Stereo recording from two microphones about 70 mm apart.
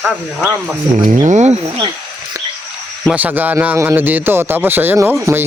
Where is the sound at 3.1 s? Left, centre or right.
Right.